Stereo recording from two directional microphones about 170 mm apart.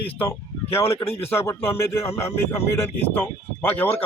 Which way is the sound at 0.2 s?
15° left (ahead or behind).